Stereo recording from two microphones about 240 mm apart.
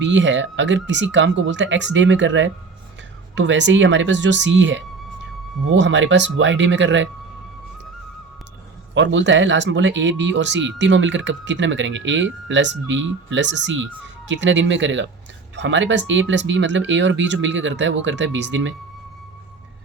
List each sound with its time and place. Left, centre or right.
0.0 s speech: right
9.0 s speech: right